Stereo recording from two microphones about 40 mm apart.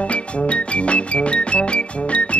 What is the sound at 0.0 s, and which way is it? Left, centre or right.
Music, left.